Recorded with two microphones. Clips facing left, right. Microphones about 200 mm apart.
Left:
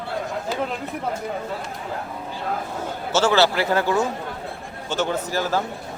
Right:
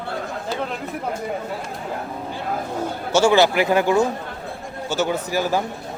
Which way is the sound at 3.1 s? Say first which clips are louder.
Right 3 dB; 15° right (ahead or behind).